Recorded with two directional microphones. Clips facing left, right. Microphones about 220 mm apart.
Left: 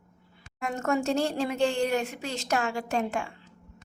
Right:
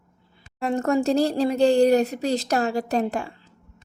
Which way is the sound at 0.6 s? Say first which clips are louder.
Right 6 dB; 35° right (ahead or behind).